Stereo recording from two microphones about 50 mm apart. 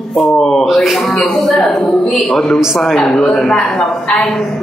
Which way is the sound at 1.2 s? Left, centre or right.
Centre.